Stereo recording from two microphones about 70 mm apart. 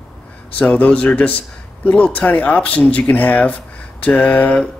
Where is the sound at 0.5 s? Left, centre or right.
Left.